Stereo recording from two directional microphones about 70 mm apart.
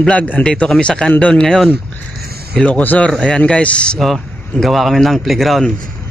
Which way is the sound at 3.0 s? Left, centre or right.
Centre.